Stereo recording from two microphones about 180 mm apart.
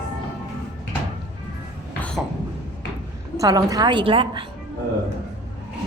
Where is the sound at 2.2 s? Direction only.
Centre (ahead or behind).